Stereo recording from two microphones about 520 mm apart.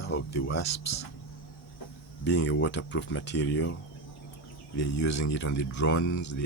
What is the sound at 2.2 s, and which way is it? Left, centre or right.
Speech, centre.